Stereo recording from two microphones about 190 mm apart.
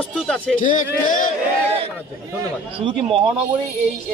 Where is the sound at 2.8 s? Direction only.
30° right (ahead or behind).